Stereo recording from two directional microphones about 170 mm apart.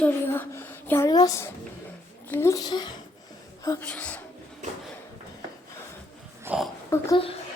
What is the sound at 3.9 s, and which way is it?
Speech, 10° left (ahead or behind).